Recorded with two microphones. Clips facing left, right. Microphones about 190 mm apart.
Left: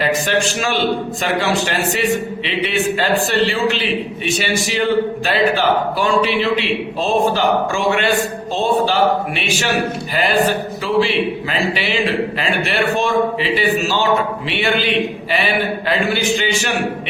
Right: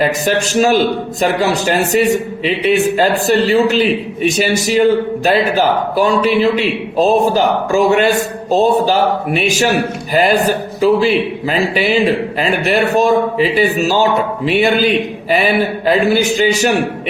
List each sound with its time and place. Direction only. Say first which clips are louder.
0.3 s a man's voice: right 6 dB; 40° right (ahead or behind)